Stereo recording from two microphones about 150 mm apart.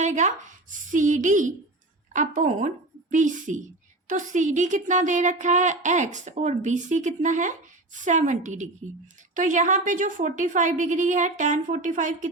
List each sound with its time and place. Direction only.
0.0 s a woman's voice: 55° right (ahead or behind)